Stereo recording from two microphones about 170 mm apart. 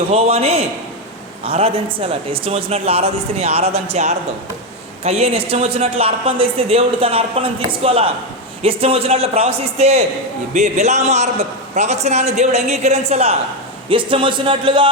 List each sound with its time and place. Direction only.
0.1 s a woman's voice: 35° right (ahead or behind)